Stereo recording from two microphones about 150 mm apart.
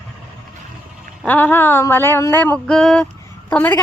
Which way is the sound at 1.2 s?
10° left (ahead or behind).